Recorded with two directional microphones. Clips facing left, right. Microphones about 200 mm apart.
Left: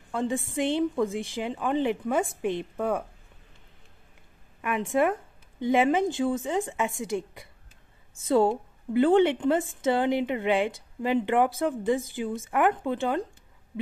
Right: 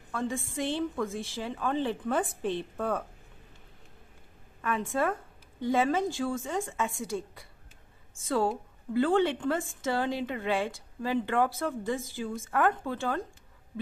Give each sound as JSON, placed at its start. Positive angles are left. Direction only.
{"t": 0.1, "sound": "a woman's voice", "side_deg": 20}
{"t": 4.6, "sound": "a woman's voice", "side_deg": 15}